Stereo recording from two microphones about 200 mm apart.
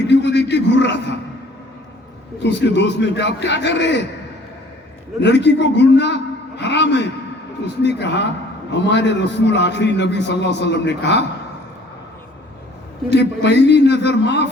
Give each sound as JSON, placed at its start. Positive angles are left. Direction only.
{"t": 0.1, "sound": "a sound", "side_deg": 60}
{"t": 2.4, "sound": "a man's voice", "side_deg": 60}
{"t": 5.2, "sound": "a man's voice", "side_deg": 60}
{"t": 13.1, "sound": "a man's voice", "side_deg": 60}